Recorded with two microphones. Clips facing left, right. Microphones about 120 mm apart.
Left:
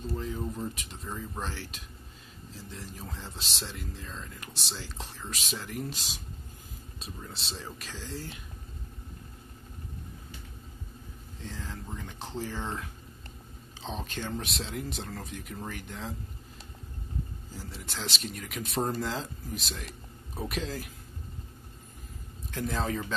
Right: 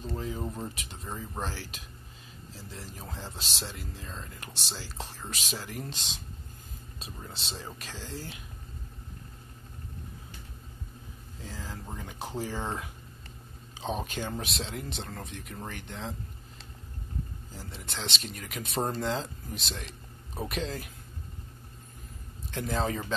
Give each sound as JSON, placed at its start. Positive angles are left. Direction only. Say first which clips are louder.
{"t": 0.1, "sound": "speech", "louder": "even", "side_deg": 0}
{"t": 11.4, "sound": "speech", "louder": "left 1 dB", "side_deg": -5}
{"t": 11.8, "sound": "speech", "louder": "right 1 dB", "side_deg": -20}
{"t": 14.5, "sound": "speech", "louder": "left 1 dB", "side_deg": 0}
{"t": 17.6, "sound": "speech", "louder": "even", "side_deg": 0}
{"t": 22.5, "sound": "speech", "louder": "right 1 dB", "side_deg": 0}